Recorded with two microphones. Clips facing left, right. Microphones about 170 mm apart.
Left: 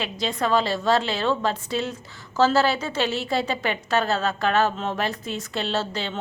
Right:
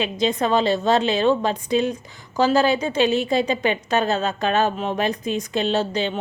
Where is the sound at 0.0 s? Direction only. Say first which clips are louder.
Right 5 dB; 20° right (ahead or behind).